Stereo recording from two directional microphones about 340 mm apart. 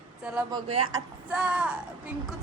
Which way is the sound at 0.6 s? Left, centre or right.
Right.